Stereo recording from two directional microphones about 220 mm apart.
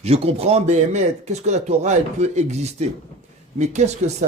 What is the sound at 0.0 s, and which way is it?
Speech, 25° right (ahead or behind).